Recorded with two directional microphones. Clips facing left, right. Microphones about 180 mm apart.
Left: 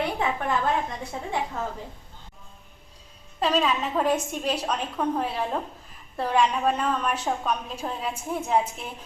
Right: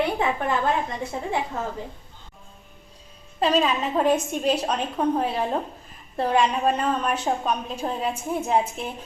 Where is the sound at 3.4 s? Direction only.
25° right (ahead or behind).